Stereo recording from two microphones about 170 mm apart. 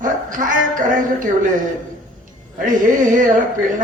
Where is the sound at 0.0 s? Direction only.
50° right (ahead or behind).